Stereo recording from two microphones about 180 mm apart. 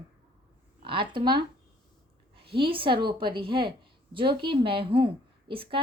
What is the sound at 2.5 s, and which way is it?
A woman's voice, 30° right (ahead or behind).